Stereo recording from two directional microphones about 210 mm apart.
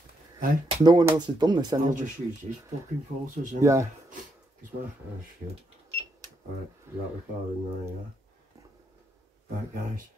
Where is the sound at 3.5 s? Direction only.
15° right (ahead or behind).